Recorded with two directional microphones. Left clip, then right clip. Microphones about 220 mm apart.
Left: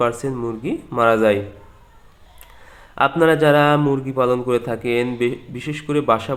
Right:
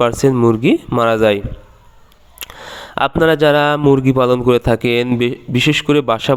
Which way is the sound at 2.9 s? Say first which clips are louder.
Right 2 dB; 40° right (ahead or behind).